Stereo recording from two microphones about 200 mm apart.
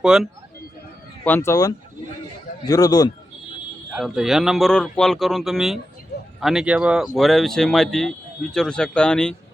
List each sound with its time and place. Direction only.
0.0 s speech: 5° right (ahead or behind)
1.2 s a man's voice: 10° left (ahead or behind)
3.9 s speech: centre (ahead or behind)